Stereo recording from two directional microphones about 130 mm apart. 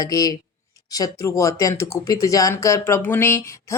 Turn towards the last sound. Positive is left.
turn(degrees=20)  # may be behind; listen again after turning